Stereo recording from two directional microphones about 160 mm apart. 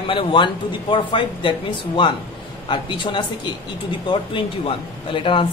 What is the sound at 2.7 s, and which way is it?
A man's voice, 30° left (ahead or behind).